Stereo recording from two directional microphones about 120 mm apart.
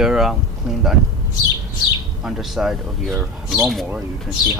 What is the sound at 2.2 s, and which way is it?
Speech, 5° right (ahead or behind).